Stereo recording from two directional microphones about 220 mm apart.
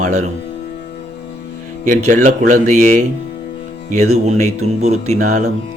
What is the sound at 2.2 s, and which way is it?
Speech, 35° right (ahead or behind).